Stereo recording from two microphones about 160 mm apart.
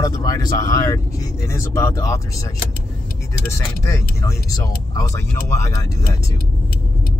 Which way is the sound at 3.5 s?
15° left (ahead or behind).